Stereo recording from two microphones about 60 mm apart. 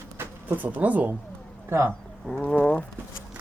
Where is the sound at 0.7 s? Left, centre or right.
Right.